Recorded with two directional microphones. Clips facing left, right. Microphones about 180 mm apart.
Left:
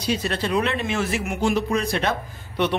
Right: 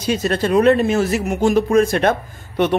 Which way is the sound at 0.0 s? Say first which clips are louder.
Right 6 dB; 45° right (ahead or behind).